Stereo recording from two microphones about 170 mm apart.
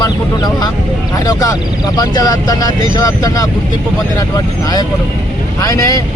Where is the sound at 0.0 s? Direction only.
25° left (ahead or behind).